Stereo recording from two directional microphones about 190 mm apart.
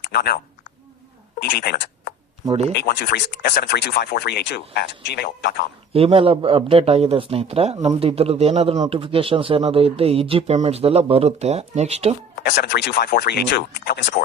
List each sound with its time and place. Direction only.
0.0 s a woman's voice: 60° left (ahead or behind)
2.5 s speech: 35° right (ahead or behind)
2.7 s speech: 55° left (ahead or behind)
5.9 s speech: 30° right (ahead or behind)
12.6 s speech: 60° left (ahead or behind)